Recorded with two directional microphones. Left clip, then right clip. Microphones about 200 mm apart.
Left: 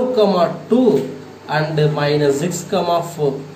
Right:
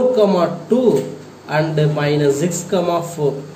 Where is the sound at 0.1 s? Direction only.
40° right (ahead or behind).